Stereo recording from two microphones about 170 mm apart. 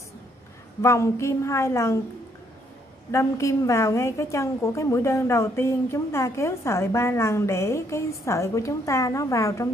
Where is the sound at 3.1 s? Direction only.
15° left (ahead or behind).